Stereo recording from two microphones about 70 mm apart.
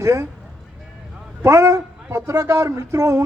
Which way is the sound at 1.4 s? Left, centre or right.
Right.